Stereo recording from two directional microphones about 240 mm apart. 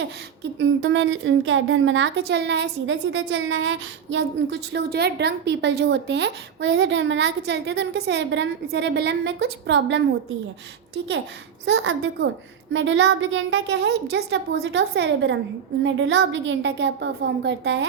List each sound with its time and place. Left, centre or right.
0.6 s a woman's voice: right
11.6 s a woman's voice: right